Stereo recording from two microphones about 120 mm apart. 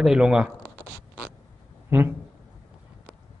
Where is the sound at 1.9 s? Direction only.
15° right (ahead or behind).